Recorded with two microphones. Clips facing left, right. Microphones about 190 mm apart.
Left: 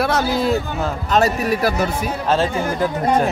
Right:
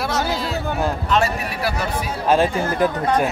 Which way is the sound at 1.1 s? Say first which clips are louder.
Left 8 dB; 40° left (ahead or behind).